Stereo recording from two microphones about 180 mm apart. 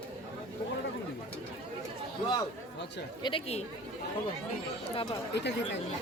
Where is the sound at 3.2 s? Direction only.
30° left (ahead or behind).